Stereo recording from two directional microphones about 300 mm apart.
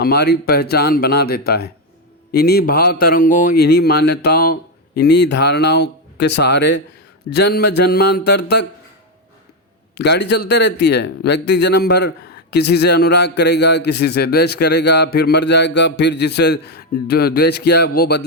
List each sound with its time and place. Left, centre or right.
0.0 s a man's voice: left
9.9 s a man's voice: left